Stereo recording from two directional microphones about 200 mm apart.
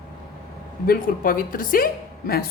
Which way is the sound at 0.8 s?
45° left (ahead or behind).